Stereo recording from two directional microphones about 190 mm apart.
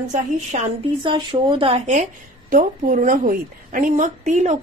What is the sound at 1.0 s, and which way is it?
A woman's voice, 25° right (ahead or behind).